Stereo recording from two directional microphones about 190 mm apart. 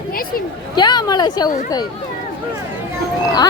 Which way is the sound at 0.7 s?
20° left (ahead or behind).